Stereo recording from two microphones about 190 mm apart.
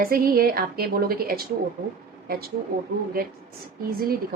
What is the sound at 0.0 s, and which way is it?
A woman's voice, 50° right (ahead or behind).